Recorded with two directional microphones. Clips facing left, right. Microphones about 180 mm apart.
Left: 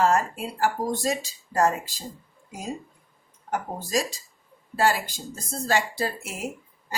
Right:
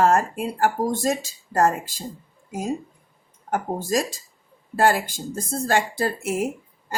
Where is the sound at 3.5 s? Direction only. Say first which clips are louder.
Right 4 dB; 50° right (ahead or behind).